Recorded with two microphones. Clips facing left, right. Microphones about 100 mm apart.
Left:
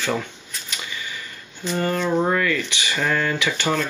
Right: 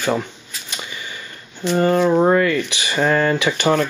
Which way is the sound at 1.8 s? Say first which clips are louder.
Right 6 dB; 30° right (ahead or behind).